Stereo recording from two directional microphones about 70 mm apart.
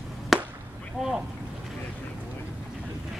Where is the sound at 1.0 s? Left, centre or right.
Centre.